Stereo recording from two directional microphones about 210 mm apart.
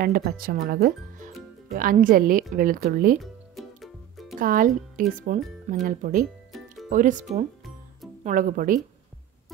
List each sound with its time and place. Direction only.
0.0 s speech: 45° right (ahead or behind)
3.2 s music: centre (ahead or behind)
4.4 s speech: 40° right (ahead or behind)